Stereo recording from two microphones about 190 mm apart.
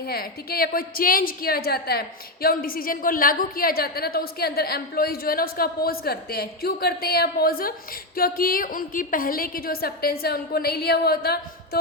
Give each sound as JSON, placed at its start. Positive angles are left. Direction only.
{"t": 0.1, "sound": "a woman's voice", "side_deg": 50}